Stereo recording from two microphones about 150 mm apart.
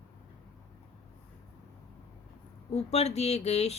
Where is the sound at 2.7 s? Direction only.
45° left (ahead or behind).